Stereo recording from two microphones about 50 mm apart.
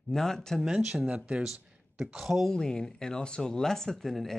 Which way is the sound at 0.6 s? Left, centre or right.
Centre.